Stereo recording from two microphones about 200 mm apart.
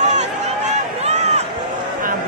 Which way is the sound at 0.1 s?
35° right (ahead or behind).